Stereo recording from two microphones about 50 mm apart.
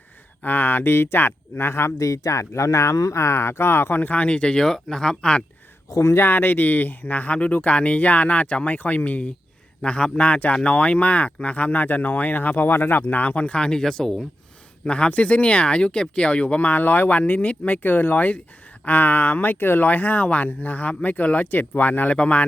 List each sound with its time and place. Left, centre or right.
0.4 s speech: left; by 5.4 s centre
5.9 s speech: left; by 14.3 s centre
14.8 s speech: left
17.8 s speech: left